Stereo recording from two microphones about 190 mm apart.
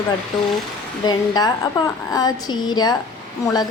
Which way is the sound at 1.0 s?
20° left (ahead or behind).